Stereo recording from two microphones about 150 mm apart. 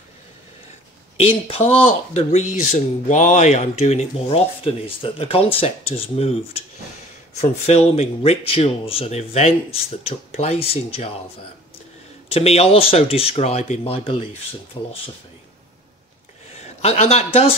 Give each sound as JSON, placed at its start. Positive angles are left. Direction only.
{"t": 1.1, "sound": "speech", "side_deg": 40}
{"t": 12.3, "sound": "speech", "side_deg": 40}
{"t": 16.6, "sound": "a man's voice", "side_deg": 45}